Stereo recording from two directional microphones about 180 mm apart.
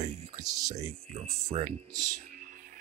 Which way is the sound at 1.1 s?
35° right (ahead or behind).